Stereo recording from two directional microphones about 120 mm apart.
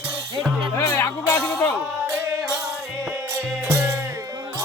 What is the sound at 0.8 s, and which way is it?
Music, 20° left (ahead or behind).